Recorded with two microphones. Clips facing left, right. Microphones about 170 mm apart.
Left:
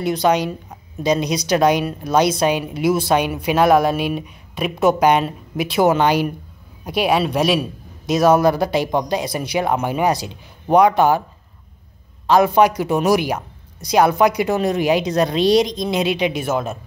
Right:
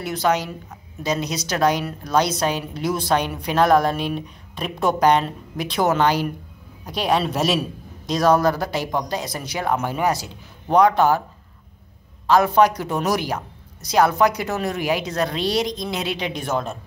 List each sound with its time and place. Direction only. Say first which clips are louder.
0.0 s a woman's voice: left 4 dB; 15° left (ahead or behind)
12.3 s a woman's voice: left 2 dB; 15° left (ahead or behind)
16.4 s speech: left 3 dB; 5° left (ahead or behind)